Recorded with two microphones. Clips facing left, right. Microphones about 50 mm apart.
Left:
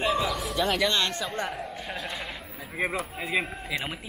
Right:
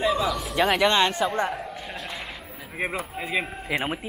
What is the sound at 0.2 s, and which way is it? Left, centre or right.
Speech, centre.